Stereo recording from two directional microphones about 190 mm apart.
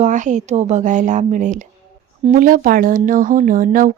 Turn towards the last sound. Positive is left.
turn(degrees=-45)  # may be behind; listen again after turning